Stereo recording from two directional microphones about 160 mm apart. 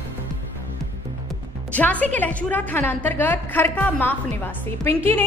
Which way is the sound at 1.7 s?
10° left (ahead or behind).